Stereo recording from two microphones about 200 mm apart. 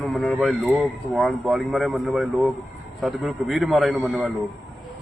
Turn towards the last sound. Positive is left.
turn(degrees=-5)  # may be behind; listen again after turning